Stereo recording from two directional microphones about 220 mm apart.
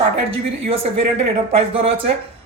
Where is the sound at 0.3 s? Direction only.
25° right (ahead or behind).